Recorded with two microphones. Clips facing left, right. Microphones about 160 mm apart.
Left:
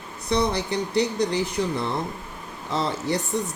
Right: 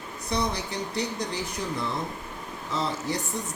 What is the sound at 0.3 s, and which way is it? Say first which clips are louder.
Speech: left 6 dB; 70° left (ahead or behind).